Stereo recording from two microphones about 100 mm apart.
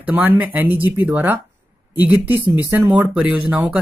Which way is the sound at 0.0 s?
15° right (ahead or behind).